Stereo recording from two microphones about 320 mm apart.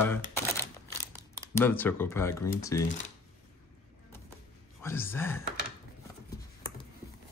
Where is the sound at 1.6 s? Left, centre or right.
Centre.